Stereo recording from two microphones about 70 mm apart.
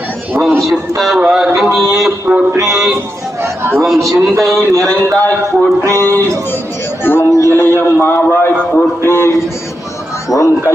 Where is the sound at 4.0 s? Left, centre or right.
Right.